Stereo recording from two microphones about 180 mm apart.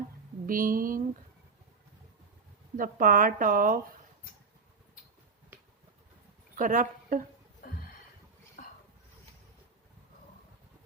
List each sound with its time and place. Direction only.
0.4 s speech: 50° right (ahead or behind)
2.7 s speech: 50° right (ahead or behind)
6.6 s a woman's voice: 50° right (ahead or behind)
7.6 s a sound: 55° left (ahead or behind)